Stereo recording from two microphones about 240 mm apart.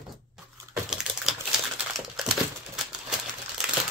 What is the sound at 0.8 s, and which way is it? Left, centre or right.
Typewriter, centre.